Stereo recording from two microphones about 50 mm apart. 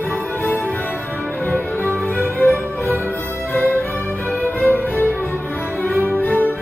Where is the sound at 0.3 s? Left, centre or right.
Left.